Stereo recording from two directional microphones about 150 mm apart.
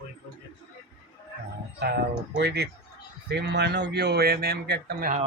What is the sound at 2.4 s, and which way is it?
Speech, 90° right.